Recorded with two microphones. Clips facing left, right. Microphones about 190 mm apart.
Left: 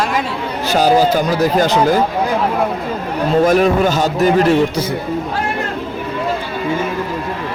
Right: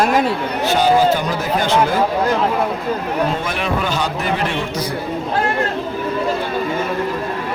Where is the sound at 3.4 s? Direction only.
40° left (ahead or behind).